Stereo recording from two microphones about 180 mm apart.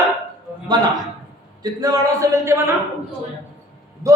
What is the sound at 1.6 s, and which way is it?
A man's voice, 20° right (ahead or behind).